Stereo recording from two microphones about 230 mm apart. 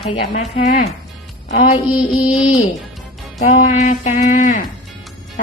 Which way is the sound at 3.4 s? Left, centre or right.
Left.